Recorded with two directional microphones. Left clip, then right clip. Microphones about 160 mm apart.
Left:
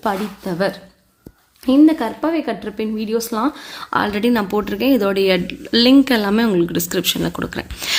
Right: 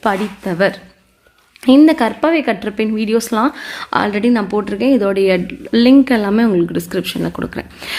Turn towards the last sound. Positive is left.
turn(degrees=-5)  # may be behind; listen again after turning